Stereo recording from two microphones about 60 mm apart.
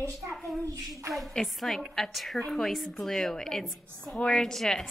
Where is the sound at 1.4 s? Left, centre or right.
Centre.